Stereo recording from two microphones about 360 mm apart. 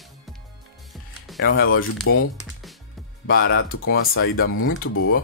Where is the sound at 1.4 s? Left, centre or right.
Left.